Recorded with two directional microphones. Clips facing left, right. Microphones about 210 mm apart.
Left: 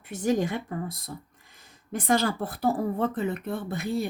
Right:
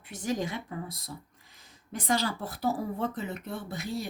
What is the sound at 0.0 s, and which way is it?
Speech, 50° left (ahead or behind).